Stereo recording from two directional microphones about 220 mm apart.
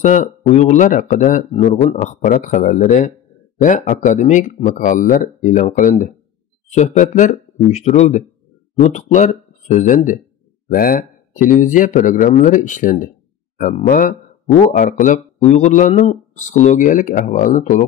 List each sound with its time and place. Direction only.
0.0 s speech: 35° left (ahead or behind)